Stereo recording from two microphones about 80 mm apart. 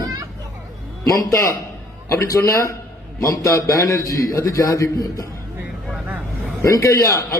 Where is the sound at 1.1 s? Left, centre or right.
Left.